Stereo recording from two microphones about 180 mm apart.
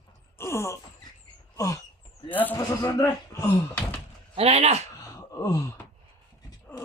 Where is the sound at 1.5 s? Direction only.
15° left (ahead or behind).